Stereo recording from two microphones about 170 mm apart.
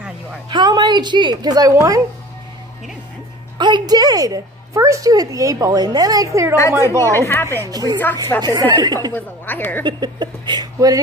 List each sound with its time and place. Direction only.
0.5 s a woman's voice: 25° right (ahead or behind)
3.5 s a woman's voice: 25° right (ahead or behind)
7.0 s speech: 15° left (ahead or behind)
7.6 s a woman's voice: 20° right (ahead or behind)
9.1 s speech: 10° left (ahead or behind)
9.8 s a woman's voice: 25° right (ahead or behind)